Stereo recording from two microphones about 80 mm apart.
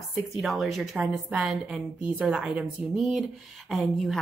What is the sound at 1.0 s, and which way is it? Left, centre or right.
Speech, centre.